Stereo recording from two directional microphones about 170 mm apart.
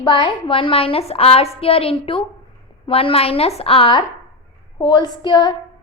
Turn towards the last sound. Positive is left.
turn(degrees=25)  # may be behind; listen again after turning